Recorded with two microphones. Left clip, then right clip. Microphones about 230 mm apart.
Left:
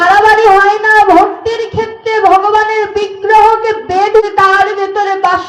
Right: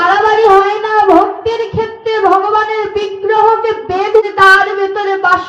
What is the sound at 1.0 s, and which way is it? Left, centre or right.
Music, left.